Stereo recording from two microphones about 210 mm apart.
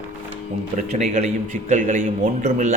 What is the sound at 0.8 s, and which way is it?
A man's voice, 35° right (ahead or behind).